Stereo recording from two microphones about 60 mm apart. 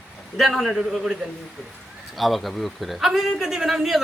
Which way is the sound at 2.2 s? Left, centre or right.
Centre.